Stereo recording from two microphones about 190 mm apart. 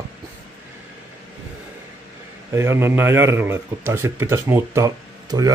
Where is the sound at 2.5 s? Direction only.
15° right (ahead or behind).